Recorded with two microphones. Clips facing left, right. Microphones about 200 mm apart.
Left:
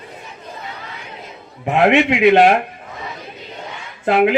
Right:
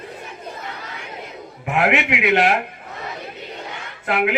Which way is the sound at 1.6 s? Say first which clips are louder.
Left 6 dB; 25° left (ahead or behind).